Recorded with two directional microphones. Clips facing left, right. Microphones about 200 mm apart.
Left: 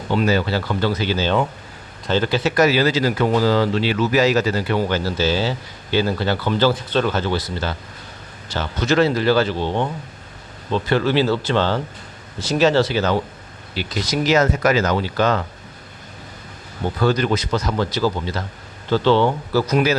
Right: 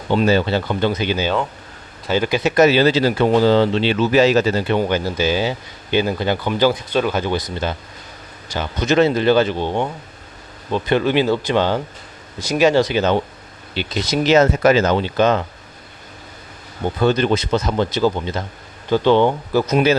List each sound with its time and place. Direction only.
0.1 s speech: 25° right (ahead or behind)
16.8 s speech: 20° right (ahead or behind)